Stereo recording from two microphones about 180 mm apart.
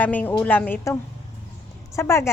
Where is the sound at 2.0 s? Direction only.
15° left (ahead or behind).